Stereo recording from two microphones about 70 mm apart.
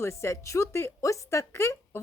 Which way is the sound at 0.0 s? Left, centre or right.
Left.